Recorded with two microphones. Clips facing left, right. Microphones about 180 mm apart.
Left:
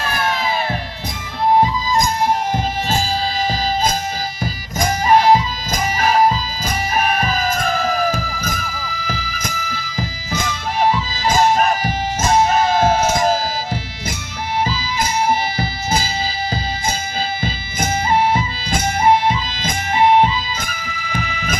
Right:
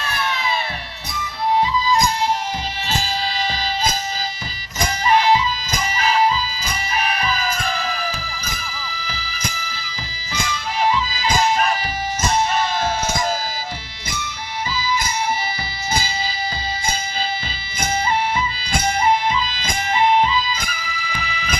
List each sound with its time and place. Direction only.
0.0 s music: 45° left (ahead or behind)
4.8 s music: 45° left (ahead or behind)
17.4 s music: 50° left (ahead or behind)